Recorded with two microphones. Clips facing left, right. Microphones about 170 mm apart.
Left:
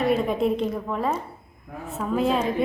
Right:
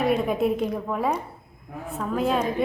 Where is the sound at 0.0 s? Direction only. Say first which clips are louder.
Even; centre (ahead or behind).